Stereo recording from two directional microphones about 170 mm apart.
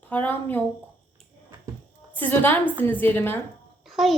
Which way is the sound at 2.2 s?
10° left (ahead or behind).